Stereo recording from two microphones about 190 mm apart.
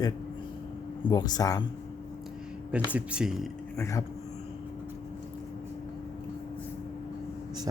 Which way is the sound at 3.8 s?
15° left (ahead or behind).